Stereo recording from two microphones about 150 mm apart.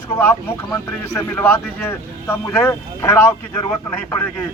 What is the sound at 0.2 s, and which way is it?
Speech, 15° left (ahead or behind).